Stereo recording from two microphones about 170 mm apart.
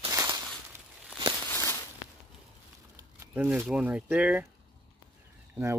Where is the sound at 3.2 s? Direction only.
10° right (ahead or behind).